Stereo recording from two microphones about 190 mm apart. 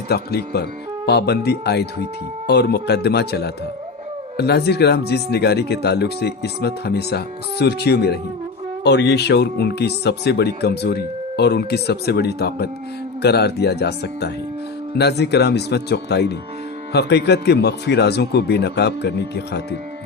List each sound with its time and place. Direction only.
0.1 s speech: 60° left (ahead or behind)